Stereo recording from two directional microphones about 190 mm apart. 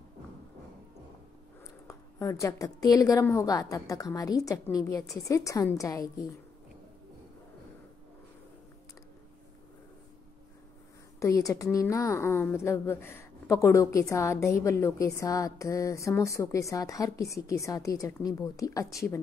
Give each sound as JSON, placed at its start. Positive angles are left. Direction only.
{"t": 1.9, "sound": "a woman's voice", "side_deg": 15}
{"t": 11.1, "sound": "a woman's voice", "side_deg": 15}